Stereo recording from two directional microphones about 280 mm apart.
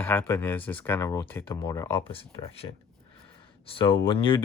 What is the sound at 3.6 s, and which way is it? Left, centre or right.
Speech, centre.